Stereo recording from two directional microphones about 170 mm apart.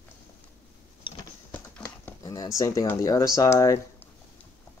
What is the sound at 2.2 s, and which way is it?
Speech, 20° left (ahead or behind).